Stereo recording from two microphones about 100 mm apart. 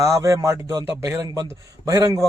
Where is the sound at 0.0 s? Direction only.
30° right (ahead or behind).